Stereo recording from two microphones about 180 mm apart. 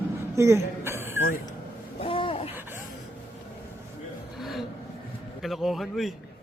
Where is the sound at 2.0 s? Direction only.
30° left (ahead or behind).